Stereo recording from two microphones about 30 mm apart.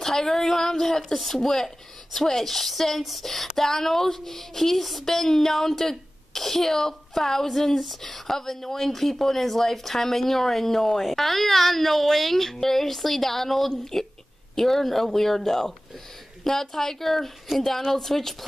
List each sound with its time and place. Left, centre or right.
0.0 s a woman's voice: centre
3.0 s speech: centre
3.5 s a woman's voice: centre